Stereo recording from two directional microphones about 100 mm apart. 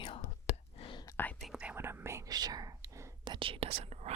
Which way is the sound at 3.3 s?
60° right (ahead or behind).